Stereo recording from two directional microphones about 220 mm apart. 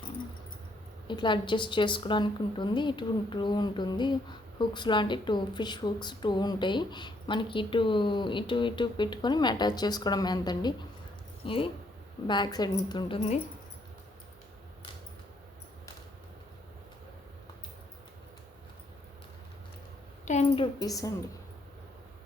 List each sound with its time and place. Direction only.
1.0 s a woman's voice: 20° left (ahead or behind)
20.2 s a sound: 30° left (ahead or behind)
20.8 s a woman's voice: 15° left (ahead or behind)